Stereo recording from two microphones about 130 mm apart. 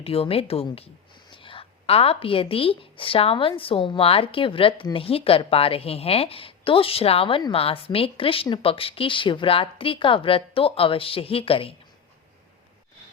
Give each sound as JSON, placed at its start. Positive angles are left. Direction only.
{"t": 0.0, "sound": "a woman's voice", "side_deg": 50}